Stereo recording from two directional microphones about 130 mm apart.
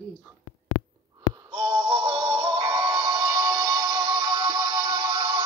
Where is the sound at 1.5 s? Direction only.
35° right (ahead or behind).